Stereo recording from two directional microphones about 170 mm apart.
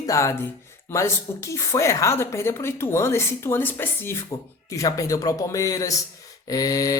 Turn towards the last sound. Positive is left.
turn(degrees=20)  # may be behind; listen again after turning